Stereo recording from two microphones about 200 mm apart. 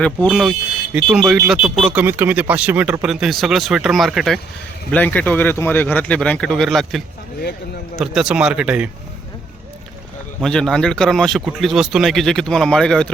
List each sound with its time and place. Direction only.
0.0 s speech: 5° left (ahead or behind)
10.4 s speech: 5° left (ahead or behind)